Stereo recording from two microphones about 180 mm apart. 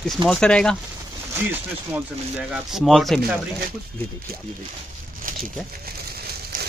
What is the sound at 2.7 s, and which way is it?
Speech, centre (ahead or behind).